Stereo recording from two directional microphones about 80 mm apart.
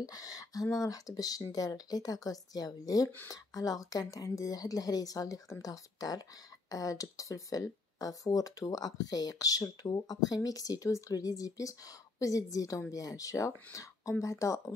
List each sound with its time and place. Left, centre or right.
0.0 s speech: left